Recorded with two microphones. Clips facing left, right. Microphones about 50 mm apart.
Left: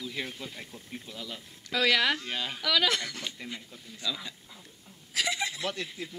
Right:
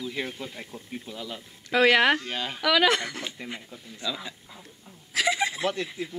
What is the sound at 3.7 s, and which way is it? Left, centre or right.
Speech, centre.